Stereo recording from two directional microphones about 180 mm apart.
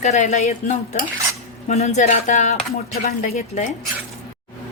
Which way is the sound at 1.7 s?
40° left (ahead or behind).